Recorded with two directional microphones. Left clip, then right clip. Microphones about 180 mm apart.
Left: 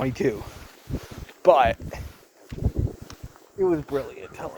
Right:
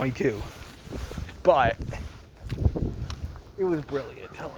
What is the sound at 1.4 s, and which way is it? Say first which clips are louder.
Speech: left 3 dB; 60° left (ahead or behind).